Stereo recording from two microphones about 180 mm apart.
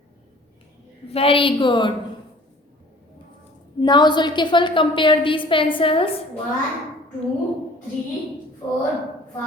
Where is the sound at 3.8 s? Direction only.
25° left (ahead or behind).